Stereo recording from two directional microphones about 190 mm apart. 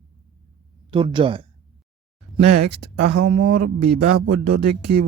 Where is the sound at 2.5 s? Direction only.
60° right (ahead or behind).